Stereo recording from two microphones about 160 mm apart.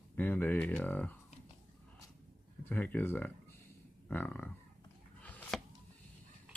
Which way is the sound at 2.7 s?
10° left (ahead or behind).